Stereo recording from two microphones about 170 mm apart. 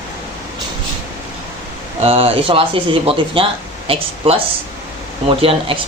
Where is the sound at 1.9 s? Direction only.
35° right (ahead or behind).